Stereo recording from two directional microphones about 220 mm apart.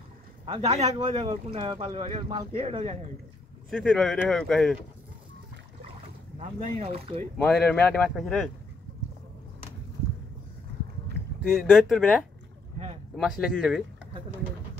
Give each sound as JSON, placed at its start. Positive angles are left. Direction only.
{"t": 0.5, "sound": "speech", "side_deg": -25}
{"t": 3.7, "sound": "speech", "side_deg": 0}
{"t": 6.4, "sound": "speech", "side_deg": -30}
{"t": 7.4, "sound": "speech", "side_deg": 0}
{"t": 11.7, "sound": "speech", "side_deg": 0}